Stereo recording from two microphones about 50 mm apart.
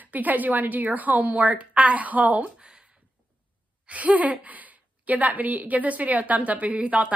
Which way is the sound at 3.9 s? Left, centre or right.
Right.